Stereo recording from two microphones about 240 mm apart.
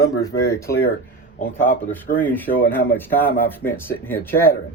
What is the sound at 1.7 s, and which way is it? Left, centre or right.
Speech, left.